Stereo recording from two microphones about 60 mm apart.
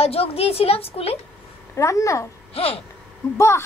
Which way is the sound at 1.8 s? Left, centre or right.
Left.